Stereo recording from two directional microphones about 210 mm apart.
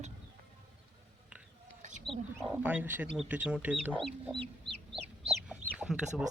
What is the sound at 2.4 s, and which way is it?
Speech, 10° right (ahead or behind).